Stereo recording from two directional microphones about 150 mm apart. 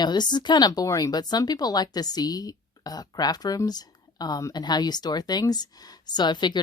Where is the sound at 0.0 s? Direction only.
30° left (ahead or behind).